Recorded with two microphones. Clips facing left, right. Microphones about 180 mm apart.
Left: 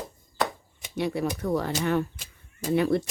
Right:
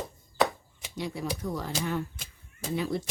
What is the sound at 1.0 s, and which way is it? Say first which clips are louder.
Speech: left 6 dB; 65° left (ahead or behind).